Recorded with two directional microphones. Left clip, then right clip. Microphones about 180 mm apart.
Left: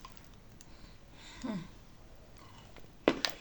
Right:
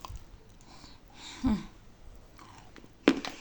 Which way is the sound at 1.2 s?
55° right (ahead or behind).